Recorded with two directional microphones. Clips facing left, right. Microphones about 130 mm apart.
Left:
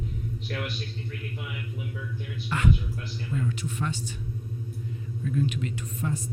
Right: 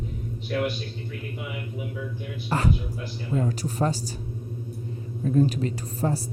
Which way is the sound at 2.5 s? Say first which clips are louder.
Right 1 dB; 35° right (ahead or behind).